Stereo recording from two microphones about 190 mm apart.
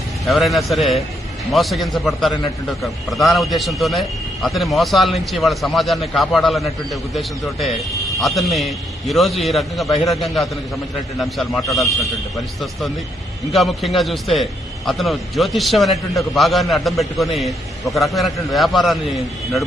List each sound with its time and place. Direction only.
0.3 s a man's voice: centre (ahead or behind)
13.5 s a man's voice: centre (ahead or behind)